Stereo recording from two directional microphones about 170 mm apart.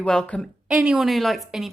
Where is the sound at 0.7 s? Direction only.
5° right (ahead or behind).